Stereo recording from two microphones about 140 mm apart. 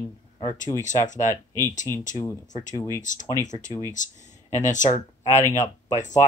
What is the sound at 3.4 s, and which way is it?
Speech, 60° left (ahead or behind).